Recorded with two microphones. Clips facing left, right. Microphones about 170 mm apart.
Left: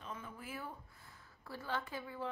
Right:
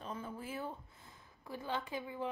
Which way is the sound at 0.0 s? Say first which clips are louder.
Right 4 dB; 30° right (ahead or behind).